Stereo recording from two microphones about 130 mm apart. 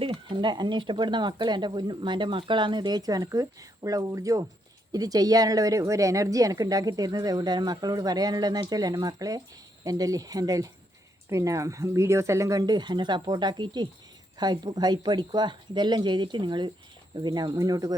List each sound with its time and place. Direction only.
0.0 s speech: 45° right (ahead or behind); by 17.9 s 30° right (ahead or behind)